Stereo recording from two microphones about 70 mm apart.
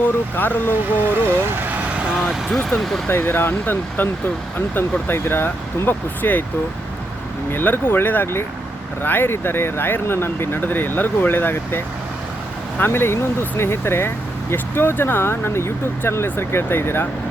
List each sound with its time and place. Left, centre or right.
0.0 s speech: left
2.1 s speech: centre
3.1 s speech: left
7.5 s speech: left
12.8 s speech: left